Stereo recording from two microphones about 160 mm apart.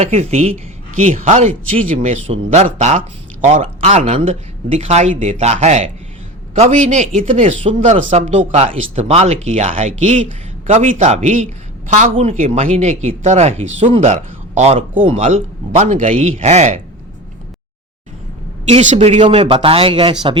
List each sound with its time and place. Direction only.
0.0 s speech: 45° right (ahead or behind)
18.7 s speech: 50° right (ahead or behind)